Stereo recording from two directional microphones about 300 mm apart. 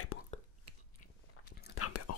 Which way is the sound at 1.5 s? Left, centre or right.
Left.